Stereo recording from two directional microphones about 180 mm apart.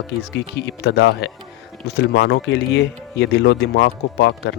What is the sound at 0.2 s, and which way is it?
Speech, 70° left (ahead or behind).